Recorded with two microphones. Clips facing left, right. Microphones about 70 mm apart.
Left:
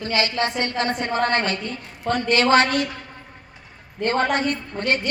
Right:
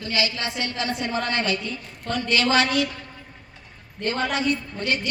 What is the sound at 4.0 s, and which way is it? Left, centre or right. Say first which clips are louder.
A woman's voice: left 4 dB; left.